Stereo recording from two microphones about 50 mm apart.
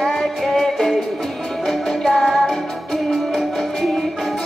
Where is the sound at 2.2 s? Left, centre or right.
Centre.